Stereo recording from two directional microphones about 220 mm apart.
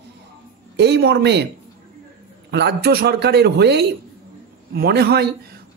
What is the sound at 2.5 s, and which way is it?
A man's voice, 50° right (ahead or behind).